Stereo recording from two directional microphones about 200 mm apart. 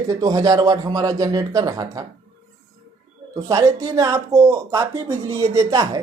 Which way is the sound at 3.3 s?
15° right (ahead or behind).